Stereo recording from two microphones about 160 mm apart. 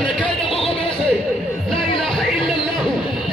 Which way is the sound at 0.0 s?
35° left (ahead or behind).